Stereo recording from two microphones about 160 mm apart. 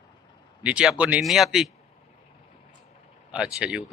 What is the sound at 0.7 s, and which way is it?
Speech, 5° right (ahead or behind).